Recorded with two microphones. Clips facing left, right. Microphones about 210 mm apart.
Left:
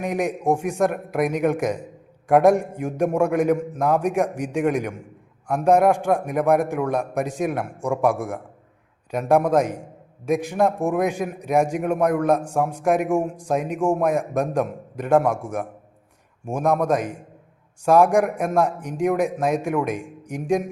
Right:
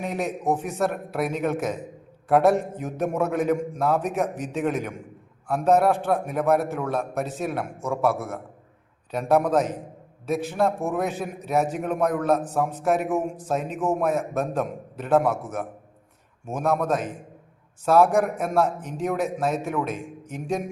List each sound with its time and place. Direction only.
0.0 s a man's voice: 15° left (ahead or behind)